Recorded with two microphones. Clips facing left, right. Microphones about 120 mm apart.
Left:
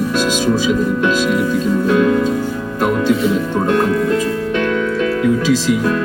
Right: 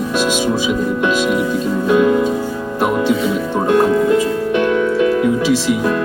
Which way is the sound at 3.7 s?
20° right (ahead or behind).